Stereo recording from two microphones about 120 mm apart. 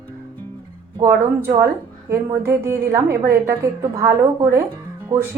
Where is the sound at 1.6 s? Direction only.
20° right (ahead or behind).